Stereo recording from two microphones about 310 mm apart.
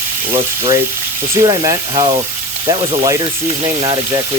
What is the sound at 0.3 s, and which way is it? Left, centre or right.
Speech, centre.